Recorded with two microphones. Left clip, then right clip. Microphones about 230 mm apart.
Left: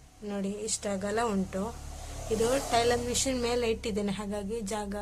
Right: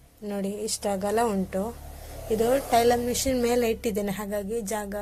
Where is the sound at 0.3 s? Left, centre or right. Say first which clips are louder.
Right 4 dB; centre.